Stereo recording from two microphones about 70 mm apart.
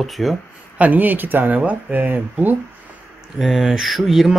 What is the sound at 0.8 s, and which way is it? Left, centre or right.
Speech, right.